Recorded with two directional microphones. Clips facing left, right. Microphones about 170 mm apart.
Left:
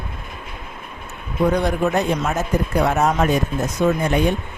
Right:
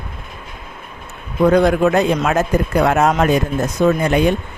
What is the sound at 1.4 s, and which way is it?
Speech, 90° right.